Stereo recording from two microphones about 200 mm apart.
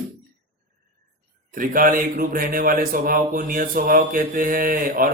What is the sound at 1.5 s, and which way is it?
Speech, 45° right (ahead or behind).